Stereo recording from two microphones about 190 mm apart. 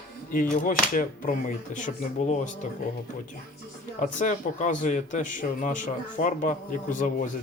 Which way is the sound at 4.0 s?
40° left (ahead or behind).